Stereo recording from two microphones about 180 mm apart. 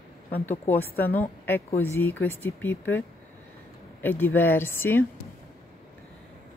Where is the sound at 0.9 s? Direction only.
55° left (ahead or behind).